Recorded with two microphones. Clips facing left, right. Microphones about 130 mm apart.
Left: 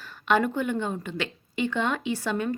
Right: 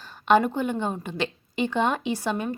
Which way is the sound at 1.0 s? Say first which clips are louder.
Right 3 dB; 20° right (ahead or behind).